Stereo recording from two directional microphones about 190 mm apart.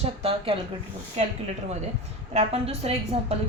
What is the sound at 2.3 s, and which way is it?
Speech, 30° right (ahead or behind).